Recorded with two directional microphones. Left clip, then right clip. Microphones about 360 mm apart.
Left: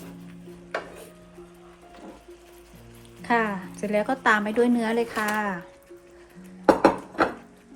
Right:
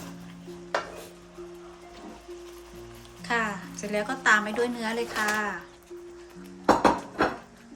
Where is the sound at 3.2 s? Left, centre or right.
Centre.